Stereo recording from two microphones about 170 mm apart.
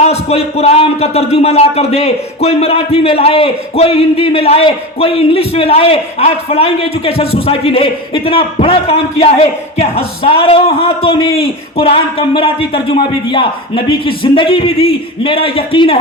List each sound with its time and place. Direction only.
0.0 s speech: 40° left (ahead or behind)